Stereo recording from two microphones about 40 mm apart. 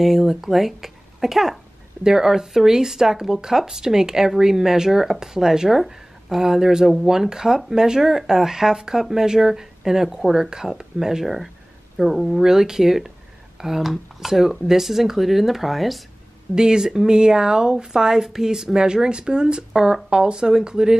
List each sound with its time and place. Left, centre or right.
0.0 s speech: centre
16.5 s speech: centre